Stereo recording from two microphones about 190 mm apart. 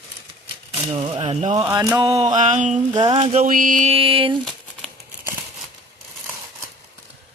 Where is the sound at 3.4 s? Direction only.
45° right (ahead or behind); by 4.4 s 30° right (ahead or behind).